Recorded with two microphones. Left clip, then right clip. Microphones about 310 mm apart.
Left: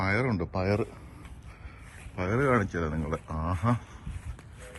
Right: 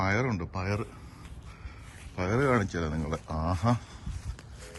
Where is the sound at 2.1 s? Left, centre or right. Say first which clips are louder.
Left 1 dB; centre.